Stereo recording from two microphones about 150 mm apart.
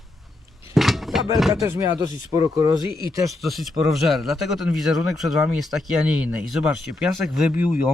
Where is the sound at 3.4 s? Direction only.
Centre (ahead or behind).